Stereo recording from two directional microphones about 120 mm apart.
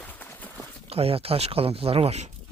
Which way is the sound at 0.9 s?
55° right (ahead or behind).